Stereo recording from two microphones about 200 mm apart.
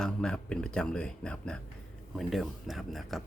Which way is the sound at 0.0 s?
5° left (ahead or behind).